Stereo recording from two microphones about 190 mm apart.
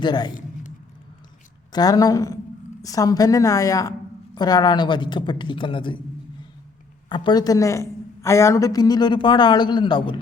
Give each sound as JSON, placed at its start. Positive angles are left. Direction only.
{"t": 0.0, "sound": "a woman's voice", "side_deg": 25}
{"t": 1.7, "sound": "a woman's voice", "side_deg": 20}
{"t": 7.1, "sound": "a woman's voice", "side_deg": 20}